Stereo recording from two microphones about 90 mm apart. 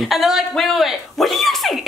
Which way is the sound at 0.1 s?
5° right (ahead or behind).